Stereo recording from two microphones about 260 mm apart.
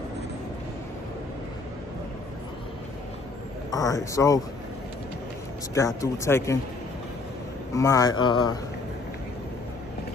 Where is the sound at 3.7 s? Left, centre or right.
Centre.